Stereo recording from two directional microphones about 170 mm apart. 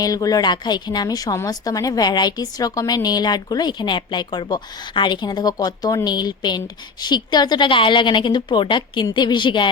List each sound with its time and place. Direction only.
0.0 s a woman's voice: 20° left (ahead or behind)